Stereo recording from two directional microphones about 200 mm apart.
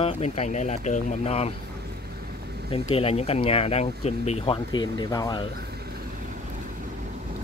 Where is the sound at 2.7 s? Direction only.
30° left (ahead or behind).